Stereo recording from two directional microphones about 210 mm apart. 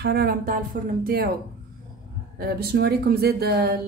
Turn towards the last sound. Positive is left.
turn(degrees=-50)  # may be behind; listen again after turning